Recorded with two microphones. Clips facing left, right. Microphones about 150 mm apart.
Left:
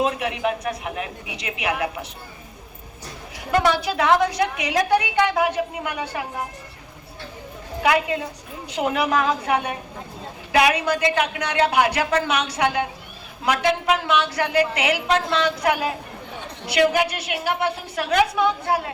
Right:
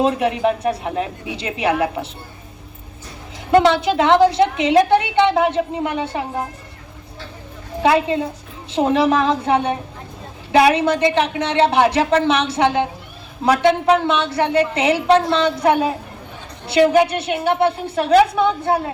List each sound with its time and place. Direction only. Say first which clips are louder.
0.0 s speech: right 6 dB; 30° right (ahead or behind)
3.5 s a woman's voice: right 6 dB; 25° right (ahead or behind)
7.8 s a woman's voice: right 5 dB; 30° right (ahead or behind)